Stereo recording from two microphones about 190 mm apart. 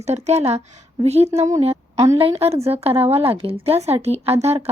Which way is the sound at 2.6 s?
30° right (ahead or behind).